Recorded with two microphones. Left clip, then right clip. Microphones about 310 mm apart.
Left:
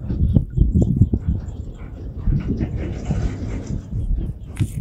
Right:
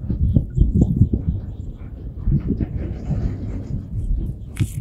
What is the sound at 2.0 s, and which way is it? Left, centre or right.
Dog, left.